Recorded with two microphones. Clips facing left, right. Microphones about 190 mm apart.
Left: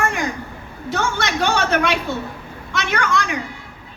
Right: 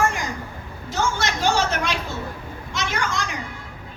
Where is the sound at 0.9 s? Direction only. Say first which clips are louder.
Left 2 dB; 60° left (ahead or behind).